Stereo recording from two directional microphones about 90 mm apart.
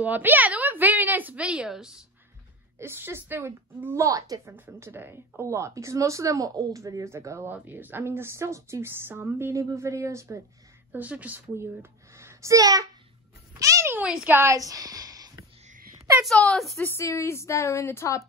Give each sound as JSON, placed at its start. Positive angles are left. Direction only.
{"t": 0.0, "sound": "a woman's voice", "side_deg": -20}
{"t": 2.8, "sound": "speech", "side_deg": -25}
{"t": 4.6, "sound": "a woman's voice", "side_deg": -25}
{"t": 9.6, "sound": "a woman's voice", "side_deg": -35}
{"t": 10.9, "sound": "speech", "side_deg": -20}
{"t": 11.5, "sound": "a child's voice", "side_deg": -30}
{"t": 13.6, "sound": "a sound", "side_deg": -35}
{"t": 13.9, "sound": "speech", "side_deg": -15}
{"t": 14.3, "sound": "a sound", "side_deg": -35}
{"t": 16.3, "sound": "speech", "side_deg": 5}
{"t": 16.8, "sound": "a woman's voice", "side_deg": 30}